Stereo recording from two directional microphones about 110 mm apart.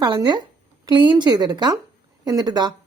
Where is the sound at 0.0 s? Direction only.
40° right (ahead or behind).